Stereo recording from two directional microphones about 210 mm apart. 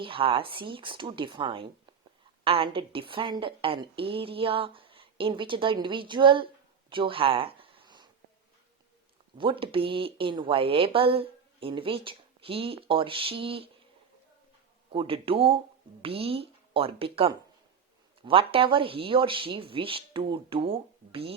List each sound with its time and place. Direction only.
0.0 s speech: 25° right (ahead or behind)
6.9 s a sound: 25° right (ahead or behind)
9.4 s speech: 25° right (ahead or behind)
14.8 s speech: 25° right (ahead or behind)